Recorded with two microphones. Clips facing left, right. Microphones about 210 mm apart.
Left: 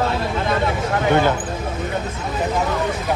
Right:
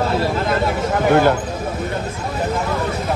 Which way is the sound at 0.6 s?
Centre (ahead or behind).